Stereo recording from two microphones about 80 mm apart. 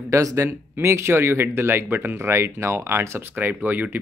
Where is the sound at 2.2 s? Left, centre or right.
Right.